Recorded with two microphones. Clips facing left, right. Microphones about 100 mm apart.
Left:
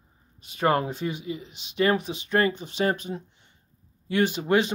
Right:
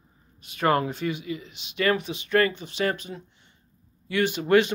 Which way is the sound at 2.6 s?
40° left (ahead or behind).